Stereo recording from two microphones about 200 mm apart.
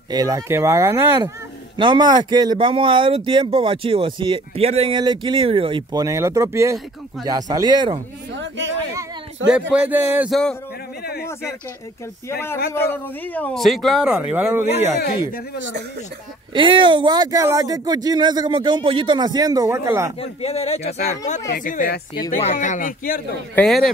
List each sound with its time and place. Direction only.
0.1 s speech: 15° right (ahead or behind)
8.4 s a sound: 65° right (ahead or behind)
9.5 s speech: 5° right (ahead or behind)
12.8 s speech: 10° left (ahead or behind); by 14.7 s 10° right (ahead or behind)
15.0 s speech: 50° left (ahead or behind)
16.5 s speech: 25° right (ahead or behind)
20.2 s speech: 30° left (ahead or behind); by 22.2 s 50° left (ahead or behind)
22.3 s speech: 35° left (ahead or behind)
23.5 s speech: 5° left (ahead or behind)